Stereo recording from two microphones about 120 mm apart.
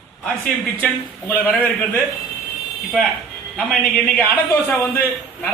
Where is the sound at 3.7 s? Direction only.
5° left (ahead or behind).